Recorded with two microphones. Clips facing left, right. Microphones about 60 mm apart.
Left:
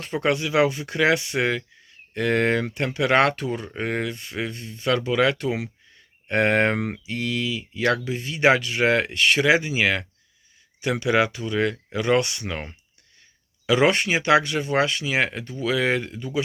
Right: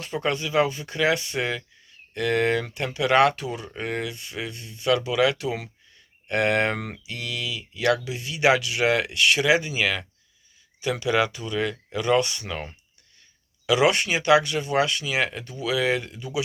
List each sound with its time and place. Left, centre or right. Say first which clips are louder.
0.0 s speech: left 3 dB; left
6.7 s speech: left 6 dB; left
7.0 s speech: left 5 dB; left
11.3 s speech: left 3 dB; left
12.2 s speech: even; left
13.7 s speech: left 1 dB; left